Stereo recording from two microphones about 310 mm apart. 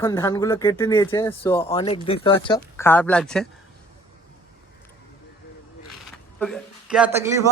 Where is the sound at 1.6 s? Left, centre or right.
Centre.